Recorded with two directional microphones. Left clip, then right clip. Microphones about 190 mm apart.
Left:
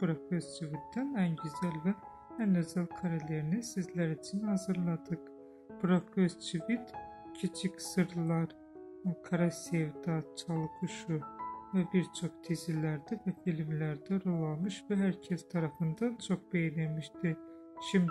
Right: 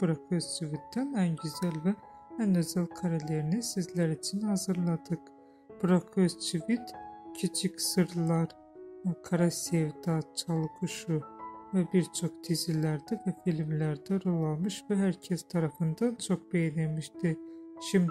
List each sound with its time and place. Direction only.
0.0 s speech: 25° right (ahead or behind)